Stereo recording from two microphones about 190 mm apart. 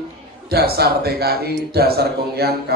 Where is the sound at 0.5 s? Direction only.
55° right (ahead or behind).